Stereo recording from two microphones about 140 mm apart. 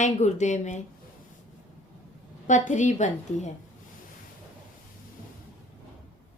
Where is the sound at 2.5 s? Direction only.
60° left (ahead or behind).